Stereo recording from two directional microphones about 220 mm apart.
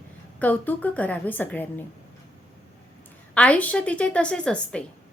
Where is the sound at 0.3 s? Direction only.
5° left (ahead or behind).